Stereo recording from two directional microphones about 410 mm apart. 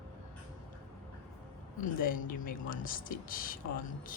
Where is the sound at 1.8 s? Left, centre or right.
Centre.